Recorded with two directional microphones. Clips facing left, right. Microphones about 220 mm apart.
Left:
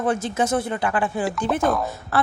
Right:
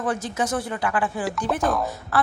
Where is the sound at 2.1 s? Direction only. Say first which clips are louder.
Left 1 dB; 25° left (ahead or behind).